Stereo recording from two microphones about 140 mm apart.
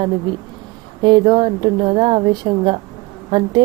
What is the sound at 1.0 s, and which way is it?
A woman's voice, 35° right (ahead or behind).